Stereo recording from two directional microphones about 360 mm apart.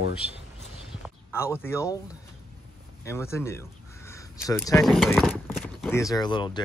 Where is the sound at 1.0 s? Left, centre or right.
Centre.